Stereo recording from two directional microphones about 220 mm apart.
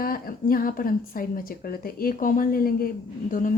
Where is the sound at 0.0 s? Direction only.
40° left (ahead or behind).